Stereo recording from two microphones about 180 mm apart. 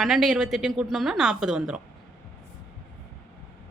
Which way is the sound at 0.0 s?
Centre (ahead or behind).